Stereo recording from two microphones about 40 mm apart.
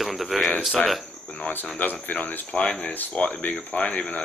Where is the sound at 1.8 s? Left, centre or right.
Left.